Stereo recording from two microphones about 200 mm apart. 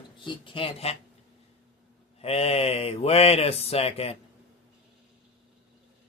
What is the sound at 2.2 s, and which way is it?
Speech, 30° left (ahead or behind).